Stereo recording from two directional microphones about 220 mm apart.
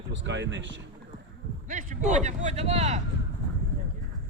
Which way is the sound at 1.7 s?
35° right (ahead or behind).